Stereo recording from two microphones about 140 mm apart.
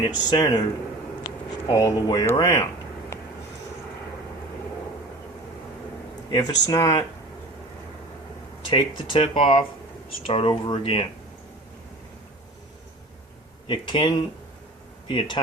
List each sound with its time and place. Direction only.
0.0 s speech: 30° left (ahead or behind)
6.3 s speech: 30° left (ahead or behind)
8.7 s speech: 40° left (ahead or behind)
13.7 s speech: 35° left (ahead or behind)